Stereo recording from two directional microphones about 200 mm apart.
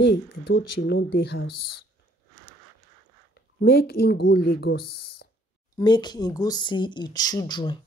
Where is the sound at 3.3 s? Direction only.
55° left (ahead or behind).